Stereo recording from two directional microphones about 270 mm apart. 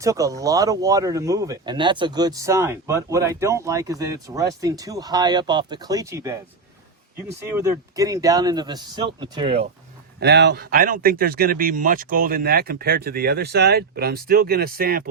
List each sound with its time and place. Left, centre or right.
0.0 s speech: centre
7.4 s speech: centre
10.2 s speech: right